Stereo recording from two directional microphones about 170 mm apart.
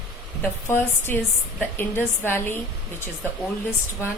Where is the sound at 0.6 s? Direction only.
15° left (ahead or behind).